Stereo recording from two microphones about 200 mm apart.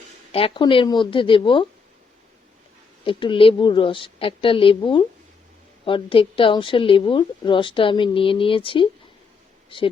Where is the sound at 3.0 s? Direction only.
25° left (ahead or behind).